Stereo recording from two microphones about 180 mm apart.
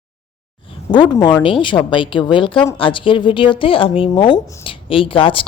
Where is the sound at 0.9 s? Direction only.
25° left (ahead or behind).